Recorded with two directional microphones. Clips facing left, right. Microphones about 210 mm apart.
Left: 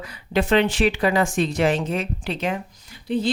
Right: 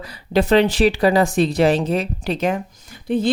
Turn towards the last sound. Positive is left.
turn(degrees=-50)  # may be behind; listen again after turning